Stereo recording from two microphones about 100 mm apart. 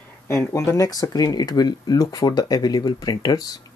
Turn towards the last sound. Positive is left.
turn(degrees=40)  # may be behind; listen again after turning